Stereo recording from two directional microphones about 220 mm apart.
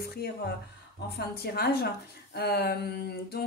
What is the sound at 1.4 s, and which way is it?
Speech, 45° left (ahead or behind).